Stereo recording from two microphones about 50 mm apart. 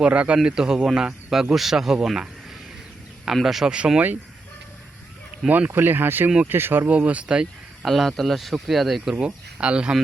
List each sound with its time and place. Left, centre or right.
0.0 s speech: right
0.4 s speech: centre
3.4 s speech: centre
3.8 s speech: centre
5.5 s speech: right
5.7 s speech: right
6.9 s speech: right
7.9 s speech: centre
9.2 s speech: right